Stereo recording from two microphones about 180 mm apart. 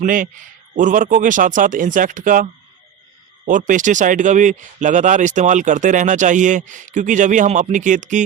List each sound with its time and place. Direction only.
0.0 s speech: 50° right (ahead or behind)